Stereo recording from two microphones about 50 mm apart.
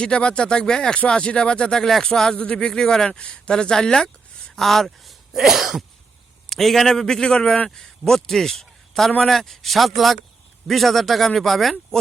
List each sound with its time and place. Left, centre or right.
0.0 s speech: centre
6.5 s a man's voice: centre